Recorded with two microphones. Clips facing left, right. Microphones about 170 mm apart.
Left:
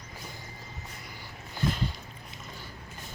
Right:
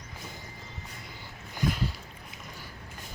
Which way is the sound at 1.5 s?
10° right (ahead or behind).